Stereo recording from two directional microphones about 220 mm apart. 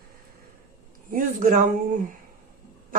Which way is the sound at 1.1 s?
40° right (ahead or behind).